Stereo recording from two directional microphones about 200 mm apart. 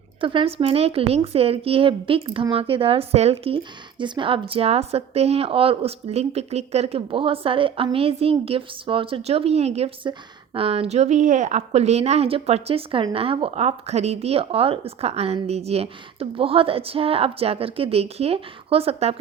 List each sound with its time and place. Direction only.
0.2 s a woman's voice: 25° right (ahead or behind)